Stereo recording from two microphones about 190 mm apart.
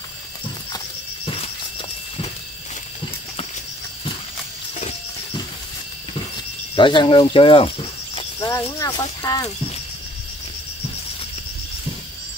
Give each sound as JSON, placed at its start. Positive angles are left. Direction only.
{"t": 0.7, "sound": "cricket", "side_deg": 30}
{"t": 6.7, "sound": "speech", "side_deg": 25}
{"t": 8.4, "sound": "speech", "side_deg": 15}